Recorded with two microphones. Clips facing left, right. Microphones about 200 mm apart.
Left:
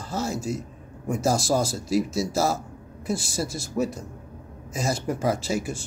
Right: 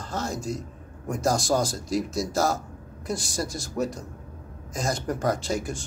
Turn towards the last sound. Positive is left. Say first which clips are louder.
# left 1 dB
turn(degrees=5)  # may be behind; listen again after turning